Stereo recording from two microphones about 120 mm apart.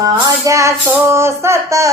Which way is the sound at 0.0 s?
25° right (ahead or behind).